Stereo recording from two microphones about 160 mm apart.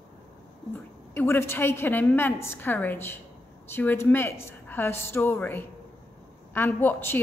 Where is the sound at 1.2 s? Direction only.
15° left (ahead or behind).